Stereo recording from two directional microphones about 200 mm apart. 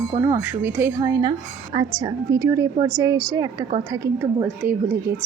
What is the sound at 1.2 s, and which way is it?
A woman's voice, 25° right (ahead or behind).